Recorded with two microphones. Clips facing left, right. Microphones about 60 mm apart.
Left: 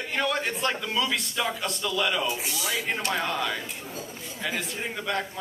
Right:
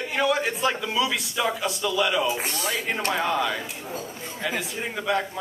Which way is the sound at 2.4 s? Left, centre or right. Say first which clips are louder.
Right 3 dB; right.